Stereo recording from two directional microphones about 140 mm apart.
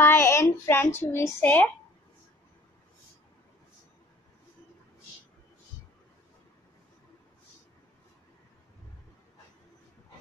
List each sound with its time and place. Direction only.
0.0 s speech: 15° left (ahead or behind)